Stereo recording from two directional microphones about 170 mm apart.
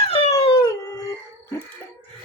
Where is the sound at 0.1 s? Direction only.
35° left (ahead or behind).